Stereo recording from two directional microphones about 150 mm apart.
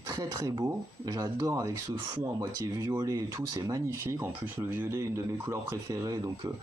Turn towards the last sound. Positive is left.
turn(degrees=-25)  # may be behind; listen again after turning